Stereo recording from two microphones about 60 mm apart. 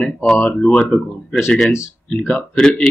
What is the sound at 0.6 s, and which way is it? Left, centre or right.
Speech, centre.